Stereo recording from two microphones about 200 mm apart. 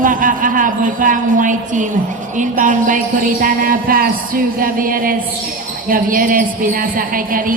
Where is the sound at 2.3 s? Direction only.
40° right (ahead or behind).